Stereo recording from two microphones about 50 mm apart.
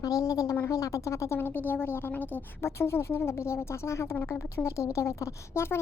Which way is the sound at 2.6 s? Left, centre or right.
Left.